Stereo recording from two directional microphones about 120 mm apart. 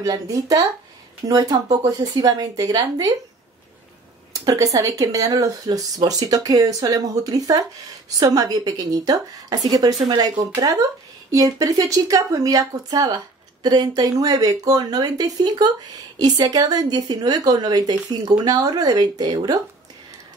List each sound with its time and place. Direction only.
0.0 s speech: 30° right (ahead or behind)
4.3 s speech: 30° right (ahead or behind)